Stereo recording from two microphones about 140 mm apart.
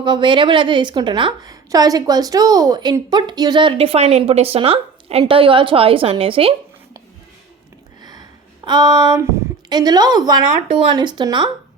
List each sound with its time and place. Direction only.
0.0 s a woman's voice: 35° right (ahead or behind)
8.0 s a sound: 30° right (ahead or behind)
9.6 s a woman's voice: 30° right (ahead or behind)